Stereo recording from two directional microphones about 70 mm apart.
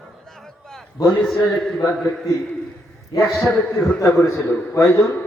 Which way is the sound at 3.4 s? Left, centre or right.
Left.